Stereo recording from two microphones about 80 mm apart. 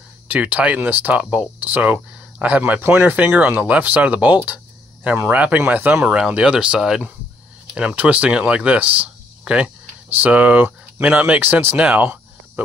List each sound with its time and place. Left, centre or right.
0.3 s speech: centre
6.0 s speech: centre